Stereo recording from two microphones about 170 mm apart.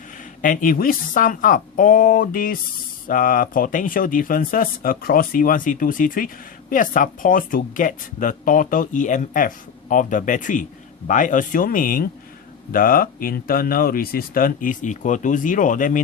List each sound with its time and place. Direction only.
0.4 s speech: 55° left (ahead or behind)